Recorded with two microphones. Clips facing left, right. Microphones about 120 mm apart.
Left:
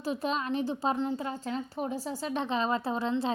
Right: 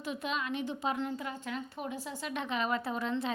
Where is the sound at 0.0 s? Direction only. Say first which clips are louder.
Left 5 dB; 35° left (ahead or behind).